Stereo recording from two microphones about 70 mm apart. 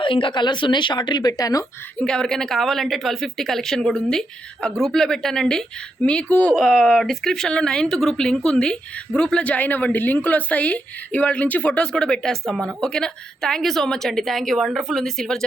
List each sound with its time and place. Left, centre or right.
0.3 s speech: left
2.0 s speech: centre
6.5 s speech: centre